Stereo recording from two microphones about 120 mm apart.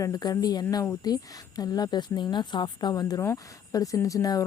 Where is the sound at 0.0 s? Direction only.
30° left (ahead or behind).